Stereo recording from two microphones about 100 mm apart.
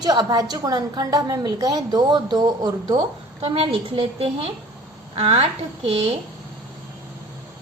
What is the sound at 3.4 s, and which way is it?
A woman's voice, 75° right (ahead or behind).